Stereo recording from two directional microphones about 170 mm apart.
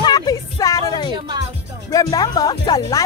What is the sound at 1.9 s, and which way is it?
Speech, 20° left (ahead or behind).